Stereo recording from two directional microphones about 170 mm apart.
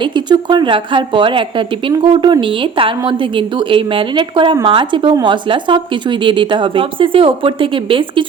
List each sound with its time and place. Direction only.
0.0 s a woman's voice: 25° right (ahead or behind)